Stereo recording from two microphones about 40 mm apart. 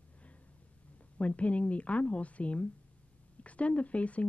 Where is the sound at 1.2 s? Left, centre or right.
Left.